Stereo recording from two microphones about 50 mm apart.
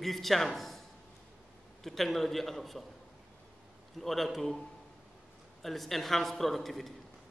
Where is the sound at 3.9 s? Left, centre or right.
Centre.